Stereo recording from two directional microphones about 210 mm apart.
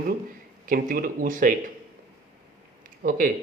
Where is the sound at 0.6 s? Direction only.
40° right (ahead or behind).